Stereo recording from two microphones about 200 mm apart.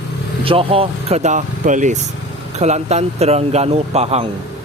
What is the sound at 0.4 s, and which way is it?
Speech, 25° right (ahead or behind).